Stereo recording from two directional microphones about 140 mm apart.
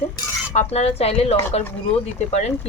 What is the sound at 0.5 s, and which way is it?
Speech, 50° left (ahead or behind).